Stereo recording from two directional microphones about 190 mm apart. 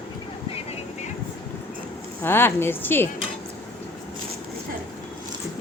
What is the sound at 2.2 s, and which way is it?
Speech, 10° left (ahead or behind).